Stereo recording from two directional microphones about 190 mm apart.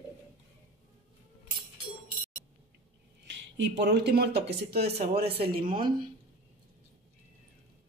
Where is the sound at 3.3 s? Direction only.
70° right (ahead or behind); by 5.9 s 45° right (ahead or behind).